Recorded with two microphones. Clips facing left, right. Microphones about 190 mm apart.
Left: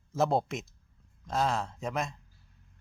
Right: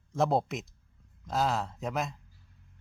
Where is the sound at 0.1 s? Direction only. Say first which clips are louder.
Even; centre (ahead or behind).